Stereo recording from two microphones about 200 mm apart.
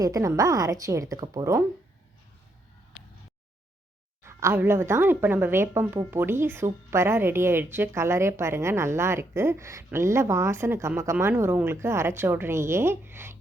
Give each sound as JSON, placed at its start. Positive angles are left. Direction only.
{"t": 0.0, "sound": "a woman's voice", "side_deg": -15}
{"t": 4.2, "sound": "a woman's voice", "side_deg": -15}